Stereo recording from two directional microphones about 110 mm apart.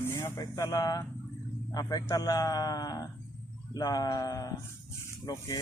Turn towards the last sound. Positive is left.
turn(degrees=30)  # may be behind; listen again after turning